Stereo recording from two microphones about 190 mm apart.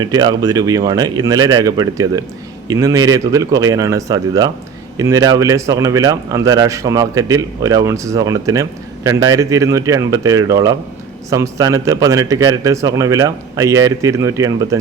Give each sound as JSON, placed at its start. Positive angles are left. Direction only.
{"t": 0.0, "sound": "a man's voice", "side_deg": -20}